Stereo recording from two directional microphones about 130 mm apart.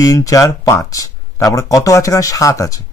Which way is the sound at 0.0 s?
25° left (ahead or behind).